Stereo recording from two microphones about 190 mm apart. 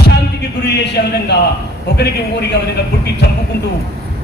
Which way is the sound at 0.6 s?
60° left (ahead or behind).